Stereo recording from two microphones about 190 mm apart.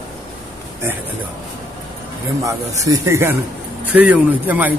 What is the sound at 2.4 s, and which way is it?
A man's voice, 15° right (ahead or behind).